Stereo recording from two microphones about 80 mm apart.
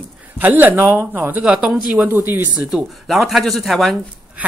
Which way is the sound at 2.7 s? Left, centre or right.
Centre.